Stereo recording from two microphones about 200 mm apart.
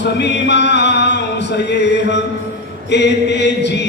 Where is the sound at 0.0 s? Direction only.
60° left (ahead or behind).